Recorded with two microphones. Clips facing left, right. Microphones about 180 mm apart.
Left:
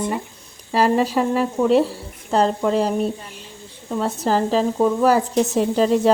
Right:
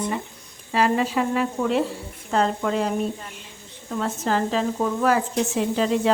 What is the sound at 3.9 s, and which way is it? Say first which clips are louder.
Speech: left 4 dB; 35° left (ahead or behind).